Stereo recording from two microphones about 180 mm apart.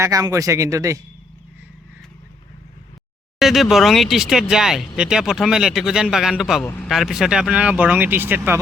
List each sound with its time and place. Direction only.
0.0 s speech: 20° right (ahead or behind)
3.3 s a man's voice: centre (ahead or behind)
6.7 s speech: 10° left (ahead or behind)
6.9 s speech: centre (ahead or behind)